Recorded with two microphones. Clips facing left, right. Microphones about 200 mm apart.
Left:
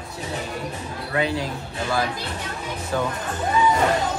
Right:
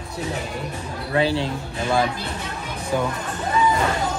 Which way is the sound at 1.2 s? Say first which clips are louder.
Right 3 dB; 30° right (ahead or behind).